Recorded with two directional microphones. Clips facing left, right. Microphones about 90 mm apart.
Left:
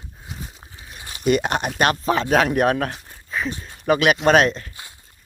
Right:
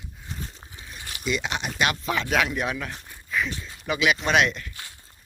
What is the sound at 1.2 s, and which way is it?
Speech, 50° left (ahead or behind).